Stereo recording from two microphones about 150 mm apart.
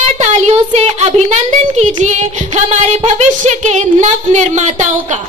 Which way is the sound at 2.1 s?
50° right (ahead or behind).